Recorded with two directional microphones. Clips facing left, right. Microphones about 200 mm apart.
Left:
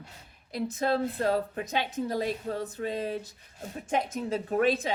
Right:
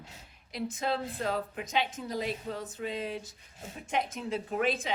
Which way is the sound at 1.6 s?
55° left (ahead or behind).